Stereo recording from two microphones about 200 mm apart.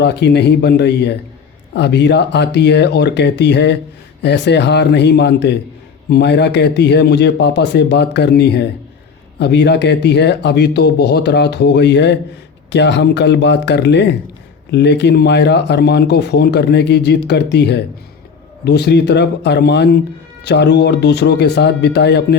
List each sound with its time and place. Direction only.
0.0 s speech: 55° left (ahead or behind)